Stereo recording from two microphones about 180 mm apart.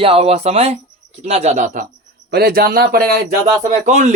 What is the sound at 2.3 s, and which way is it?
Speech, 60° right (ahead or behind).